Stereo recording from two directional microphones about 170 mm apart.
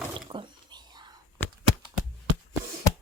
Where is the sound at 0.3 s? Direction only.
25° right (ahead or behind).